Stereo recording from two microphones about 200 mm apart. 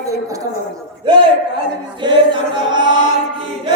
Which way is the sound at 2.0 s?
25° right (ahead or behind).